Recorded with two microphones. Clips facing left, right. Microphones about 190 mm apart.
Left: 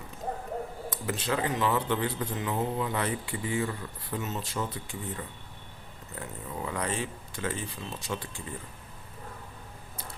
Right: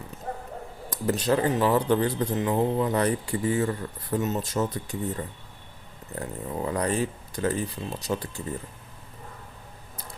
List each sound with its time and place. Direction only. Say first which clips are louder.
0.9 s speech: right 9 dB; 40° right (ahead or behind)